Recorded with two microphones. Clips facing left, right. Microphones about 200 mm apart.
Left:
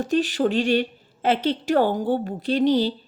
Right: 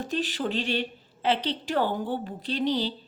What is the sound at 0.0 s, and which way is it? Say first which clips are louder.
A woman's voice: left 8 dB; 45° left (ahead or behind).